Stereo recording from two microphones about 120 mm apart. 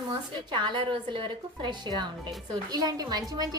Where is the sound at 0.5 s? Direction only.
40° right (ahead or behind).